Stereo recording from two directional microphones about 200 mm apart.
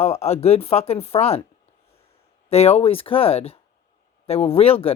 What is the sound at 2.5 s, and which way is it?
Speech, 30° left (ahead or behind).